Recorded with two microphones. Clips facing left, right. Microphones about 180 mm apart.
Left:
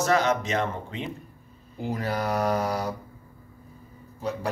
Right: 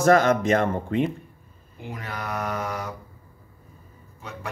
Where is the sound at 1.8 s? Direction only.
35° left (ahead or behind).